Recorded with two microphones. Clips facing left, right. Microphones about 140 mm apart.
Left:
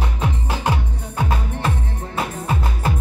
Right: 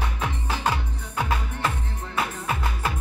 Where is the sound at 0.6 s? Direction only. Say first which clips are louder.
Left 3 dB; 20° left (ahead or behind).